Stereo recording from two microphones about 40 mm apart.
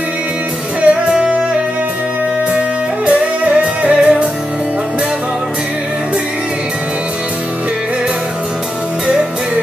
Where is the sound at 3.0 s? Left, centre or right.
Right.